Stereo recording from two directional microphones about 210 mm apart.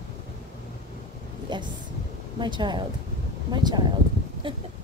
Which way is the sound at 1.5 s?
20° right (ahead or behind).